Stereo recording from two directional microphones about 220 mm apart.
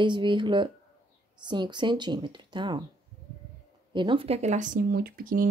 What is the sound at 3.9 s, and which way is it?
Speech, 20° right (ahead or behind).